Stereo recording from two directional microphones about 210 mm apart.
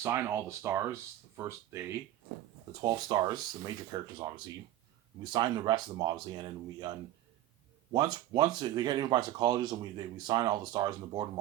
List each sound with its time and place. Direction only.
0.0 s speech: 10° right (ahead or behind)
5.2 s speech: 20° right (ahead or behind)
7.9 s speech: 20° right (ahead or behind)